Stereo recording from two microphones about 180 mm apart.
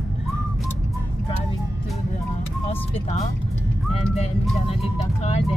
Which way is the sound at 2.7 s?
35° left (ahead or behind).